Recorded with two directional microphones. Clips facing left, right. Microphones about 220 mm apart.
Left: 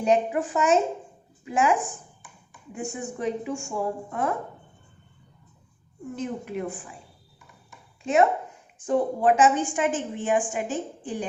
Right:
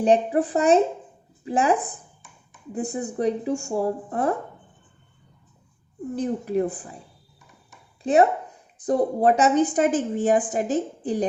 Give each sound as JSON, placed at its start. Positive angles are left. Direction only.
{"t": 0.0, "sound": "a woman's voice", "side_deg": -35}
{"t": 6.1, "sound": "a woman's voice", "side_deg": -35}
{"t": 8.0, "sound": "a woman's voice", "side_deg": -35}